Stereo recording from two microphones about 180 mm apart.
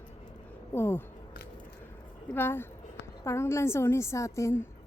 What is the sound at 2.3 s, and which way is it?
A woman's voice, 15° left (ahead or behind).